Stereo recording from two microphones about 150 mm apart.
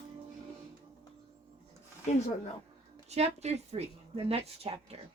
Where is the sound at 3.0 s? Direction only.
45° right (ahead or behind).